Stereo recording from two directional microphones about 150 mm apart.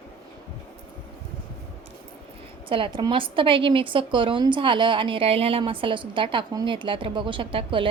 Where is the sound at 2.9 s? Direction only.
30° right (ahead or behind).